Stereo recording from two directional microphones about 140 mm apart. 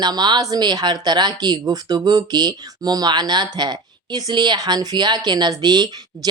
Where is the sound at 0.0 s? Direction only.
30° right (ahead or behind).